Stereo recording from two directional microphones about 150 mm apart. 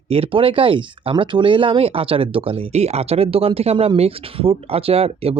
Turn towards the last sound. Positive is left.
turn(degrees=-40)  # may be behind; listen again after turning